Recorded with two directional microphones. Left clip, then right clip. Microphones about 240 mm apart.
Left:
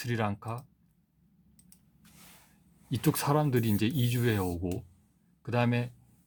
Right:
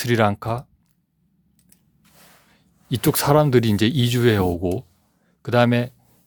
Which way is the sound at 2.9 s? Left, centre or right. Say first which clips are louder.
Right 11 dB; right.